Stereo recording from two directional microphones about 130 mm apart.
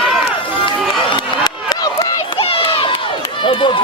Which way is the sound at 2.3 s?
45° left (ahead or behind).